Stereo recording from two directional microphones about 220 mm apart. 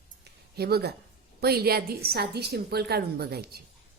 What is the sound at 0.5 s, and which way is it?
A woman's voice, 45° right (ahead or behind).